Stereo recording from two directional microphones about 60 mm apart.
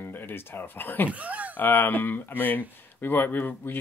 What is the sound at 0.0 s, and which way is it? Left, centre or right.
Speech, left.